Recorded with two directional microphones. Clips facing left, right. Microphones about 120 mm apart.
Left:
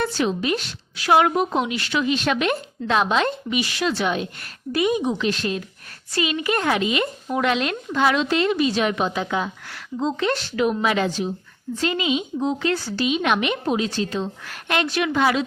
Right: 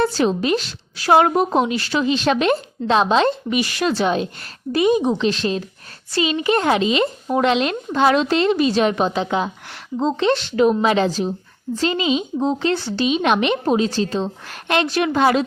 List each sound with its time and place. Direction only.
0.0 s a woman's voice: 35° right (ahead or behind)
3.5 s speech: 45° right (ahead or behind)
4.0 s a woman's voice: 30° right (ahead or behind)
8.0 s a woman's voice: 35° right (ahead or behind)